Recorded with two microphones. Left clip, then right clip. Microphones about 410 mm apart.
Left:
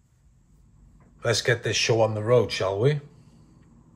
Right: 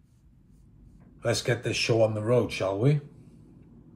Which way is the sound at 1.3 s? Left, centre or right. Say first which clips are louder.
Left 7 dB; left.